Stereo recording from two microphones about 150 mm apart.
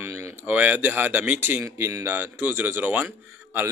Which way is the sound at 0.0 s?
15° right (ahead or behind).